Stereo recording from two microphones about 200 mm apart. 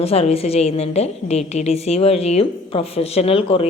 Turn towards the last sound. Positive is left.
turn(degrees=30)  # may be behind; listen again after turning